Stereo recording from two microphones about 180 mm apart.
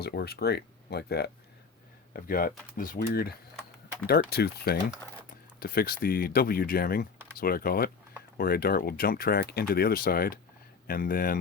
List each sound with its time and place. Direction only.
0.0 s speech: 60° left (ahead or behind)
2.1 s speech: 55° left (ahead or behind)